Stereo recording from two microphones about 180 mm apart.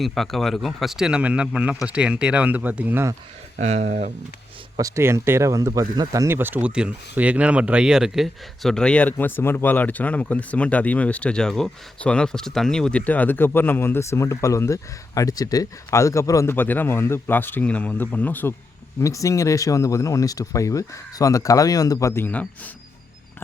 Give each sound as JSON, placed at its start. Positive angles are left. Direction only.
{"t": 0.0, "sound": "speech", "side_deg": 0}
{"t": 3.6, "sound": "speech", "side_deg": -40}
{"t": 4.8, "sound": "speech", "side_deg": -15}